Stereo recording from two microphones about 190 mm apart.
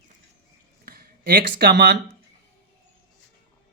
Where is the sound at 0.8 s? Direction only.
55° right (ahead or behind).